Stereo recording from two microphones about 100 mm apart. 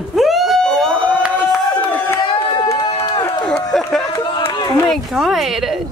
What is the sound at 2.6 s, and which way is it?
Run, 40° left (ahead or behind).